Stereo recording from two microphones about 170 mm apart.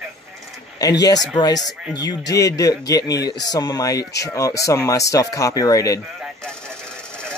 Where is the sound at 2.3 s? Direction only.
20° left (ahead or behind).